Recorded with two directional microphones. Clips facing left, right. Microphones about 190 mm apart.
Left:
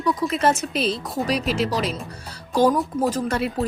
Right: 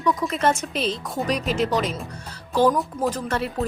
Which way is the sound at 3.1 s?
10° left (ahead or behind).